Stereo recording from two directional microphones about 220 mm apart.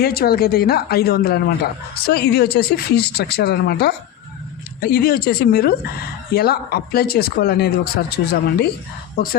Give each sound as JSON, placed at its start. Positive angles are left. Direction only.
{"t": 0.0, "sound": "speech", "side_deg": 45}